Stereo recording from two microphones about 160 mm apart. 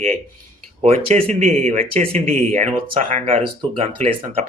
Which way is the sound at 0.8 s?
45° right (ahead or behind).